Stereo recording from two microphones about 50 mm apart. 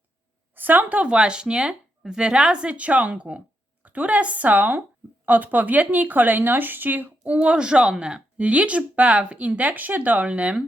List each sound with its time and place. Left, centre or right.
0.5 s speech: right
7.3 s speech: right